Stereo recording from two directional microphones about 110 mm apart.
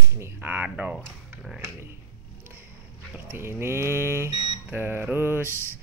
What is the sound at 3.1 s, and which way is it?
Speech, 20° right (ahead or behind).